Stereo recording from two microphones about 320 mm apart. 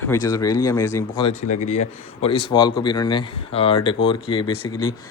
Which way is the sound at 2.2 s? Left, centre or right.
Centre.